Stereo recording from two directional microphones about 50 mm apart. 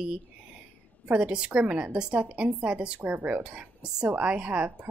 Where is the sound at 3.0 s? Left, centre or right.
Right.